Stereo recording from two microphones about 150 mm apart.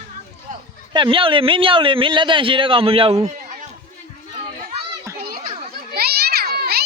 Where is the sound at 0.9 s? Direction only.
35° right (ahead or behind).